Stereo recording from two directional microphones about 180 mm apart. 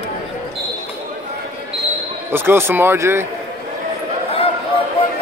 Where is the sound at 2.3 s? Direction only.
10° right (ahead or behind).